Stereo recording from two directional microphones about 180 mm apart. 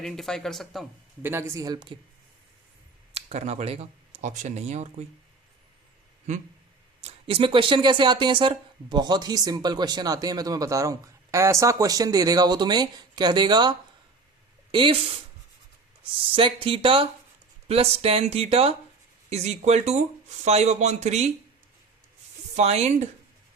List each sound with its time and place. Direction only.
0.0 s speech: centre (ahead or behind)
1.2 s speech: 15° right (ahead or behind)
3.2 s speech: 35° right (ahead or behind)
7.0 s speech: 30° right (ahead or behind)
16.2 s speech: 30° right (ahead or behind)
22.5 s speech: 35° right (ahead or behind)